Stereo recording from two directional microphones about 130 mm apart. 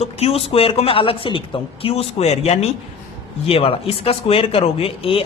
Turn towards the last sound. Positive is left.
turn(degrees=45)  # may be behind; listen again after turning